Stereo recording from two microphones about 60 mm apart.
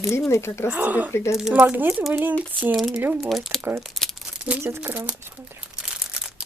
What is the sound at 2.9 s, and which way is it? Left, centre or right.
Speech, right.